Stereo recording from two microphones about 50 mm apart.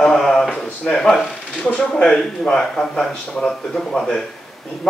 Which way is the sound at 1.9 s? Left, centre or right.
Centre.